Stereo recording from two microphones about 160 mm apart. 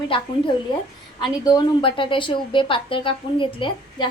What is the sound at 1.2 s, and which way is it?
A woman's voice, 25° left (ahead or behind).